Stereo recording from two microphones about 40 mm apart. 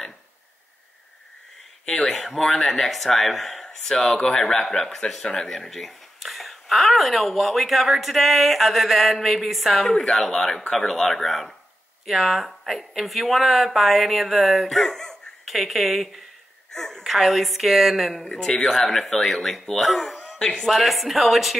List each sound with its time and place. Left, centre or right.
1.9 s speech: centre
3.6 s speech: centre
5.5 s speech: centre
9.9 s speech: centre
14.8 s speech: centre
15.4 s speech: centre
16.7 s a sound: centre
17.0 s speech: centre
18.2 s speech: centre
20.3 s speech: centre
20.6 s speech: centre